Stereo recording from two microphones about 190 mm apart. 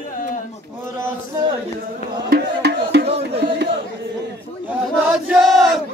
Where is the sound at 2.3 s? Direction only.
60° right (ahead or behind).